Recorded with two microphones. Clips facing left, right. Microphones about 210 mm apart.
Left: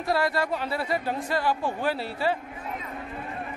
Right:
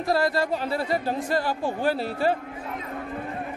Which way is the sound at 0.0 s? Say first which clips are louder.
Right 2 dB; 40° right (ahead or behind).